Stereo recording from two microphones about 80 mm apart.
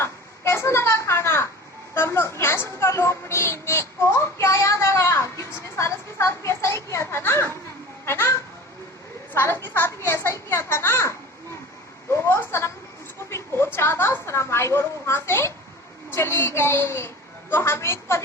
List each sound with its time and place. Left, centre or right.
0.0 s a sound: left
2.0 s a woman's voice: left
12.1 s a woman's voice: left
13.7 s a woman's voice: left